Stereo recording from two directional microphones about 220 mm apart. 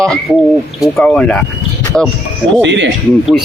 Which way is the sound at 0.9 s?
5° left (ahead or behind).